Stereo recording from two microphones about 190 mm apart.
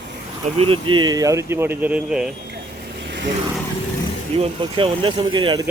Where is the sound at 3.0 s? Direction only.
60° right (ahead or behind).